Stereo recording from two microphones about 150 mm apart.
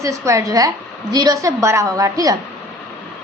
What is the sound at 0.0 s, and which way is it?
A woman's voice, 20° right (ahead or behind).